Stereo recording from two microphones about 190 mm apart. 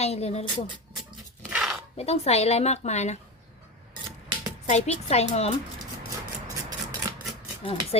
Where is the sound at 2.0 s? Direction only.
35° left (ahead or behind).